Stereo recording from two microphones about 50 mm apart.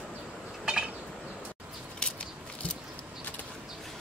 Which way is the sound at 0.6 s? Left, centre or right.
Centre.